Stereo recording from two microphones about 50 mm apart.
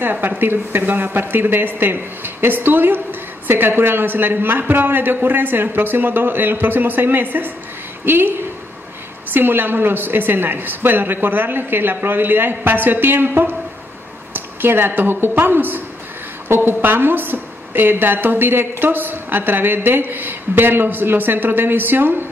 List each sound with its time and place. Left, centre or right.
0.0 s speech: right